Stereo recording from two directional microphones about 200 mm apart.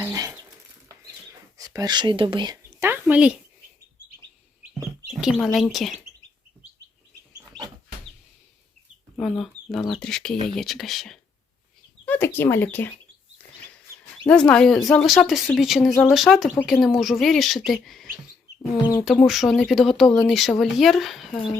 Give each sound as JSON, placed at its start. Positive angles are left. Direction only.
{"t": 0.0, "sound": "speech", "side_deg": -15}
{"t": 1.5, "sound": "speech", "side_deg": -15}
{"t": 5.2, "sound": "speech", "side_deg": 0}
{"t": 9.1, "sound": "speech", "side_deg": 0}
{"t": 14.3, "sound": "speech", "side_deg": 5}
{"t": 19.3, "sound": "speech", "side_deg": 0}